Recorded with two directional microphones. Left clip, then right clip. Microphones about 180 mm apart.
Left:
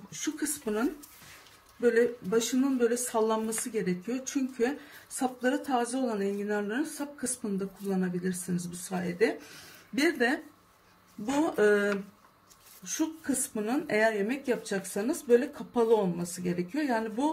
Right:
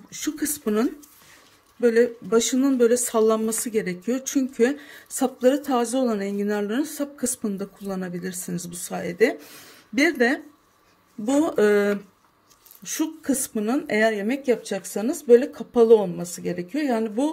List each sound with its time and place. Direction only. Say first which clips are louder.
0.1 s a woman's voice: right 6 dB; 60° right (ahead or behind)